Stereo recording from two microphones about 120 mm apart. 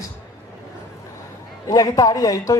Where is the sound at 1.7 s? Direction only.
30° left (ahead or behind).